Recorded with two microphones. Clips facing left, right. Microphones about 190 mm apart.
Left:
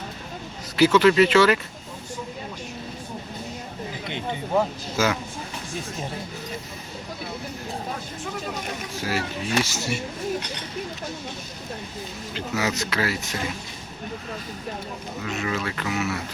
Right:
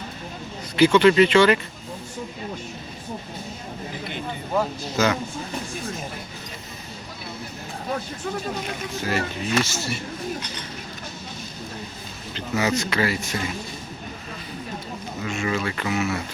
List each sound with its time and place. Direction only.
0.8 s speech: 5° left (ahead or behind)
4.1 s a sound: 20° left (ahead or behind)
5.0 s speech: 10° left (ahead or behind)
9.0 s speech: 10° left (ahead or behind)
12.3 s speech: 5° left (ahead or behind)
15.2 s speech: centre (ahead or behind)